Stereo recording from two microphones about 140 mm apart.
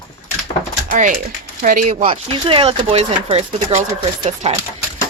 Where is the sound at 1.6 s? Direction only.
80° right.